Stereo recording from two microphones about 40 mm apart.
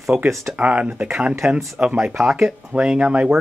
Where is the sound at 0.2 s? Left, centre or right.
Right.